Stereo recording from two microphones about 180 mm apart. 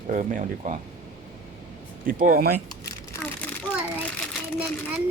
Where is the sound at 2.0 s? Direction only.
50° right (ahead or behind).